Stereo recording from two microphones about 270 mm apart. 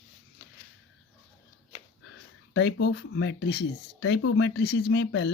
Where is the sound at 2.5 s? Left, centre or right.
Left.